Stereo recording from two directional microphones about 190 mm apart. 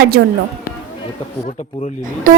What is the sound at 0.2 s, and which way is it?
Speech, 60° right (ahead or behind).